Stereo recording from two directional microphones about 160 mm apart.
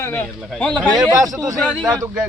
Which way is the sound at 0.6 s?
5° left (ahead or behind).